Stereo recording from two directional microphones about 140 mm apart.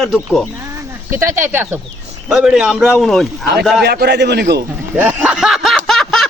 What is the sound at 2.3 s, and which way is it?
Speech, 5° right (ahead or behind).